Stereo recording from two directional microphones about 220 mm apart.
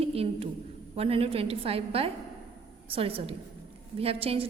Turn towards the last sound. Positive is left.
turn(degrees=-25)  # may be behind; listen again after turning